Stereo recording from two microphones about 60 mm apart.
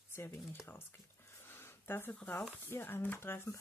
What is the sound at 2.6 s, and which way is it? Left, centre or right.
Speech, left.